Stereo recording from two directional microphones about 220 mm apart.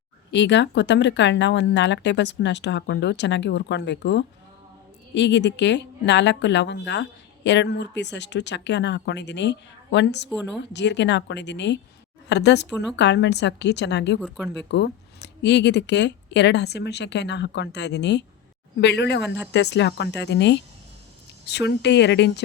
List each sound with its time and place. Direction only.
0.3 s a woman's voice: 55° left (ahead or behind)
10.3 s speech: centre (ahead or behind)
10.6 s a woman's voice: 50° left (ahead or behind)
12.7 s speech: centre (ahead or behind)
13.0 s a woman's voice: 50° left (ahead or behind)
14.2 s speech: centre (ahead or behind)
14.5 s a woman's voice: 50° left (ahead or behind)